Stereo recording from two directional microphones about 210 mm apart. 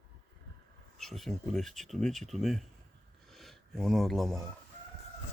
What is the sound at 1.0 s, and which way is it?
Speech, centre (ahead or behind).